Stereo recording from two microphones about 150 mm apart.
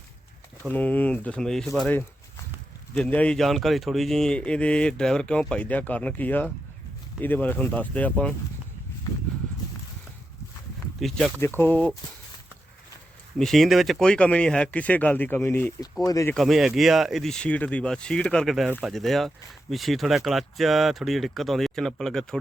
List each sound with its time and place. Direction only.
0.7 s speech: 10° left (ahead or behind)
2.9 s speech: 10° left (ahead or behind)
11.0 s speech: centre (ahead or behind)
11.3 s speech: 15° left (ahead or behind)
13.4 s speech: centre (ahead or behind); by 16.3 s 20° left (ahead or behind)
16.3 s speech: centre (ahead or behind)